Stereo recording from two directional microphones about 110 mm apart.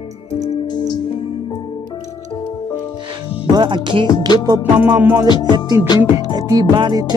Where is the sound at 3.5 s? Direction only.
45° right (ahead or behind).